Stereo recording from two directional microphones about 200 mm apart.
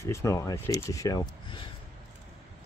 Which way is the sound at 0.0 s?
15° left (ahead or behind).